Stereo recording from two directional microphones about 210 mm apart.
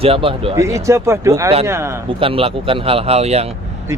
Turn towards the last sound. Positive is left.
turn(degrees=-30)  # may be behind; listen again after turning